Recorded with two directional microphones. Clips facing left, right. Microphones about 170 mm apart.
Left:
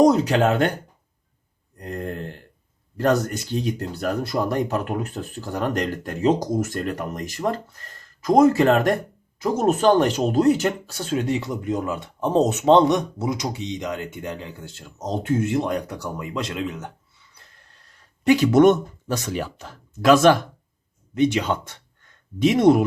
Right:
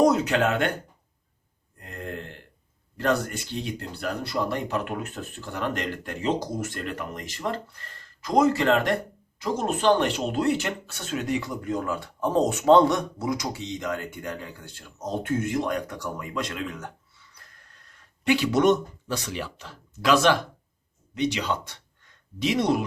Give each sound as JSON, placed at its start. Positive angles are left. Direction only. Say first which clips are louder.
{"t": 0.0, "sound": "speech", "louder": "left 4 dB", "side_deg": 35}
{"t": 1.8, "sound": "speech", "louder": "left 6 dB", "side_deg": 40}
{"t": 18.3, "sound": "speech", "louder": "left 6 dB", "side_deg": 45}